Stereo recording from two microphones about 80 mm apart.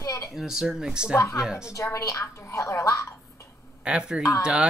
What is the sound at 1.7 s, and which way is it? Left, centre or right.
A woman's voice, left.